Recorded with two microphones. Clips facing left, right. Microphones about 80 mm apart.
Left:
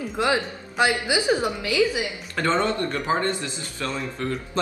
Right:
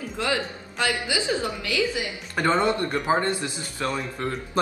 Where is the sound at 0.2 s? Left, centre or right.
Left.